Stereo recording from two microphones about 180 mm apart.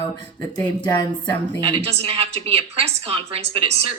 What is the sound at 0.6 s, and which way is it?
Speech, 5° left (ahead or behind).